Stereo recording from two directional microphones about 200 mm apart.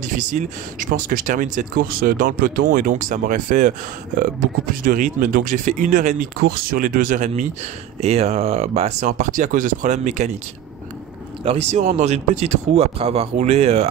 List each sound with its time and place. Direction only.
0.1 s speech: 40° right (ahead or behind)
4.8 s speech: 40° right (ahead or behind)
11.4 s speech: 30° right (ahead or behind)